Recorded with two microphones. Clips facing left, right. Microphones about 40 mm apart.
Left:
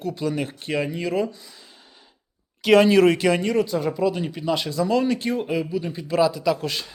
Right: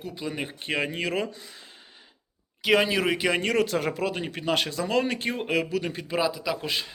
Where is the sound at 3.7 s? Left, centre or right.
Right.